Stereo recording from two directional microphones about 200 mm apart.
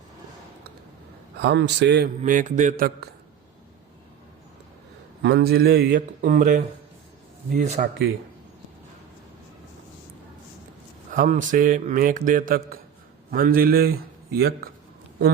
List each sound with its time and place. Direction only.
1.4 s a man's voice: 55° right (ahead or behind)
2.2 s speech: 40° right (ahead or behind)
5.2 s a man's voice: 55° right (ahead or behind); by 7.9 s 35° right (ahead or behind)
11.1 s a man's voice: 40° right (ahead or behind)